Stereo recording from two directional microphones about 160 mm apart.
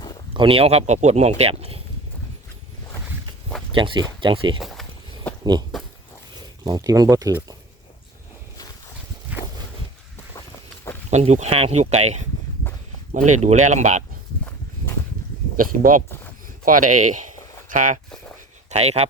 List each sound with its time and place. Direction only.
0.3 s speech: 35° right (ahead or behind)
3.7 s speech: 30° right (ahead or behind)
4.6 s a sound: centre (ahead or behind)
6.7 s speech: 25° right (ahead or behind)
9.3 s a sound: 10° right (ahead or behind)
11.1 s speech: 45° right (ahead or behind)
15.5 s speech: 60° right (ahead or behind)
18.7 s speech: 40° right (ahead or behind)